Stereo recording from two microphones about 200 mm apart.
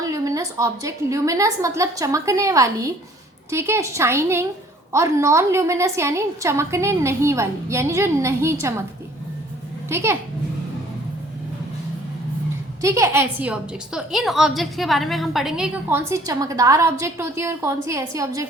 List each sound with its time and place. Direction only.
0.0 s a woman's voice: 15° right (ahead or behind)
9.9 s a woman's voice: 10° right (ahead or behind)
12.8 s a woman's voice: 15° right (ahead or behind)